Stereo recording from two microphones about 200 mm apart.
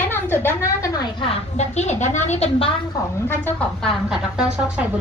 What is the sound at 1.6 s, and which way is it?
A woman's voice, 35° left (ahead or behind).